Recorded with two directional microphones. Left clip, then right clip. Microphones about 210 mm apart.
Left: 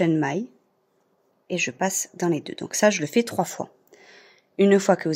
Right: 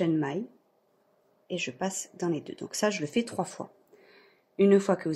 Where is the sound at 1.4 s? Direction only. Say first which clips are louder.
Left 8 dB; 50° left (ahead or behind).